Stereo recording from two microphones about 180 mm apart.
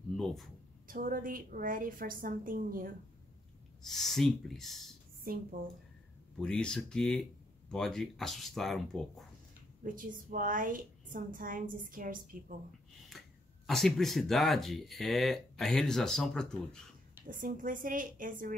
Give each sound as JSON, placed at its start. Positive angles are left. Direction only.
{"t": 0.1, "sound": "speech", "side_deg": 0}
{"t": 0.8, "sound": "a woman's voice", "side_deg": -50}
{"t": 3.8, "sound": "speech", "side_deg": 0}
{"t": 5.2, "sound": "a woman's voice", "side_deg": -55}
{"t": 6.3, "sound": "speech", "side_deg": 5}
{"t": 9.8, "sound": "a woman's voice", "side_deg": -50}
{"t": 13.1, "sound": "throat clearing", "side_deg": 0}
{"t": 13.7, "sound": "speech", "side_deg": 0}
{"t": 17.3, "sound": "a woman's voice", "side_deg": -50}